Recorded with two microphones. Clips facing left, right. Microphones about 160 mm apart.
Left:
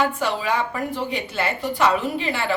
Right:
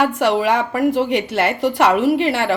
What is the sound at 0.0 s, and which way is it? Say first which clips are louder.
A woman's voice: right 6 dB; 90° right.